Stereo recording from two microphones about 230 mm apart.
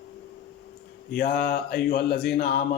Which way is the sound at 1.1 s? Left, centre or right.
Left.